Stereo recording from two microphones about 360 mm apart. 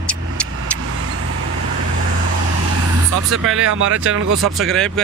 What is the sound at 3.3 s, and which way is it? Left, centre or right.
Speech, right.